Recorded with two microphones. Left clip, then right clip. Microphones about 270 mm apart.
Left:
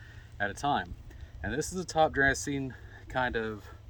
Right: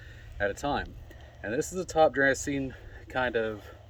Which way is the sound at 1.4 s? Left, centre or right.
Centre.